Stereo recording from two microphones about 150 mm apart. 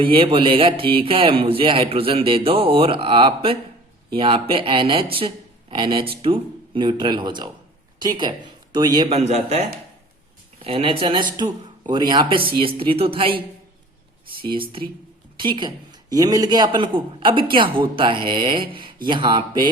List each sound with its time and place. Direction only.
0.0 s speech: 35° right (ahead or behind)
9.0 s a man's voice: 45° right (ahead or behind)
10.6 s speech: 40° right (ahead or behind)
14.4 s speech: 35° right (ahead or behind)